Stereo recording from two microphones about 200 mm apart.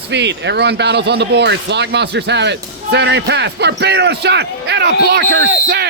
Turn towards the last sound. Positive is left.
turn(degrees=-60)  # may be behind; listen again after turning